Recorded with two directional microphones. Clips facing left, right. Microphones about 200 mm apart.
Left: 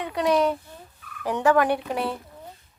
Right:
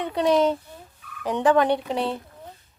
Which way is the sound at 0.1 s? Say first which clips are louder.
Right 2 dB; 25° right (ahead or behind).